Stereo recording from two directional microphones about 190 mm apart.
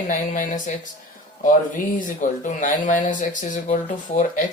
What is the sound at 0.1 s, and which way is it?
Speech, 45° left (ahead or behind).